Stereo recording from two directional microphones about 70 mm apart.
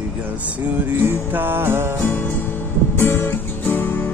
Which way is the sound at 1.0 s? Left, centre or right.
Right.